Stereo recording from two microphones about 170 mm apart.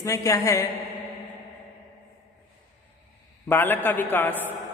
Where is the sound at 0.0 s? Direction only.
20° left (ahead or behind).